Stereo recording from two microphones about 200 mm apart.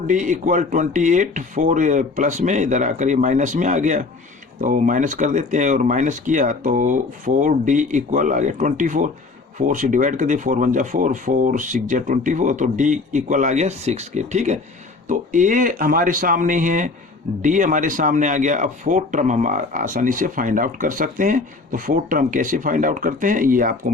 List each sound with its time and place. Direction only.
0.1 s a man's voice: 40° right (ahead or behind)